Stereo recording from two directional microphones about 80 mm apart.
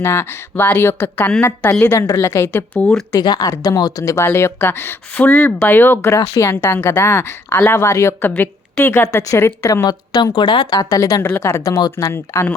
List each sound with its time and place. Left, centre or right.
0.0 s speech: left
1.9 s speech: left
2.5 s speech: left
3.1 s speech: left
6.1 s speech: left
6.4 s speech: left
8.3 s speech: left
10.3 s a woman's voice: left
10.8 s speech: left
11.2 s speech: left
11.6 s speech: left